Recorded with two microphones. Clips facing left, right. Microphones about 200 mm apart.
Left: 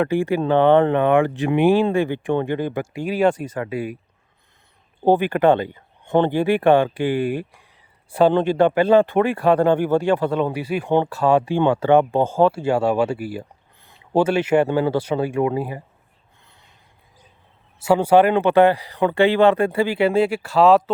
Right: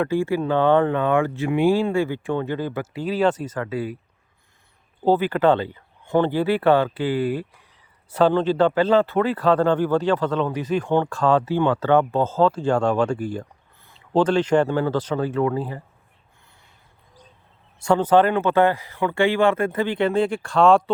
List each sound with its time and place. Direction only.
0.0 s a man's voice: 15° left (ahead or behind)
5.0 s a man's voice: 15° left (ahead or behind)
17.7 s a man's voice: 5° left (ahead or behind)